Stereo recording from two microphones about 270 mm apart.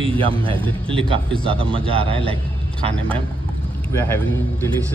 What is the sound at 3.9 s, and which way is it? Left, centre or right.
Speech, centre.